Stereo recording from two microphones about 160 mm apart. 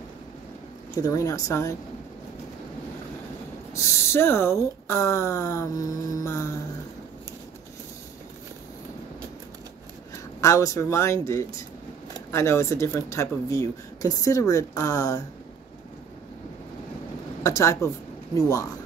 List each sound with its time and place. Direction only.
1.0 s speech: 20° left (ahead or behind)
3.7 s speech: 15° left (ahead or behind)
10.4 s speech: 20° left (ahead or behind)
17.4 s a woman's voice: 20° left (ahead or behind)